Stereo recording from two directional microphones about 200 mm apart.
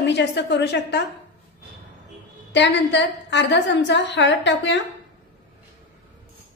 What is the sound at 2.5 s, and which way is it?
A woman's voice, 60° left (ahead or behind).